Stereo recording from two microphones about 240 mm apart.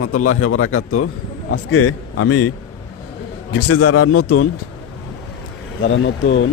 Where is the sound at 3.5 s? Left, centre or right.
Left.